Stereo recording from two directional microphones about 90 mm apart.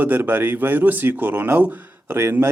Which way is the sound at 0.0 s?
20° right (ahead or behind).